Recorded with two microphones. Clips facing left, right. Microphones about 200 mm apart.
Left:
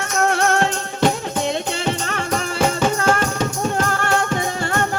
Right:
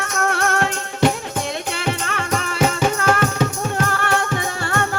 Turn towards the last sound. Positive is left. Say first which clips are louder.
# left 1 dB
turn(degrees=20)  # may be behind; listen again after turning